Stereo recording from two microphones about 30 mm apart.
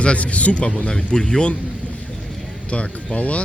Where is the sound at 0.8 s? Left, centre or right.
Left.